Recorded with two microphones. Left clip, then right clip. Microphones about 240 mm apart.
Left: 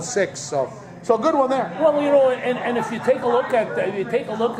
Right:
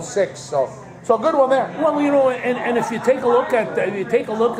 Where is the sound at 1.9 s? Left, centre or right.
Right.